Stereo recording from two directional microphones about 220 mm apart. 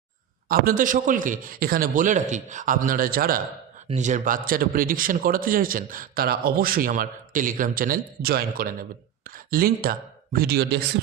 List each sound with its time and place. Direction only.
0.4 s a man's voice: 40° right (ahead or behind)